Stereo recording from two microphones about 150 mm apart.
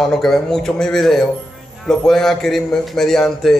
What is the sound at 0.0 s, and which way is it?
A man's voice, centre (ahead or behind).